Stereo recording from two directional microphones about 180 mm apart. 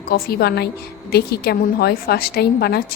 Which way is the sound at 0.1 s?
60° left (ahead or behind).